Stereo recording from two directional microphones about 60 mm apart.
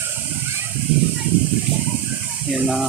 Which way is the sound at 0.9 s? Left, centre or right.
Right.